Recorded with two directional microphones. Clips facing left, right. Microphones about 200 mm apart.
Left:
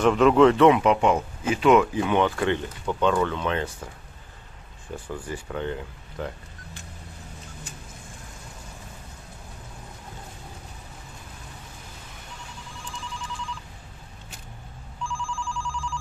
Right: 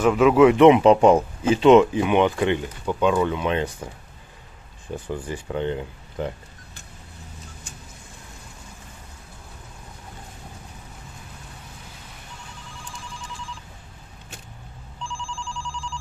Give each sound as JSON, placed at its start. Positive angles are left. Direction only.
{"t": 0.0, "sound": "speech", "side_deg": -5}
{"t": 1.0, "sound": "speech", "side_deg": -30}
{"t": 5.0, "sound": "speech", "side_deg": -20}